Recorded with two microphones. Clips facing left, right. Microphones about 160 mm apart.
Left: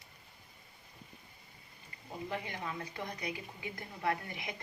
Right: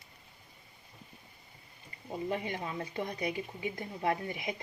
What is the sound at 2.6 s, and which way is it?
Speech, 25° right (ahead or behind).